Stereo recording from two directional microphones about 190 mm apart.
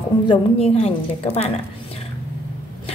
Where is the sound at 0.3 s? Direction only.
30° left (ahead or behind).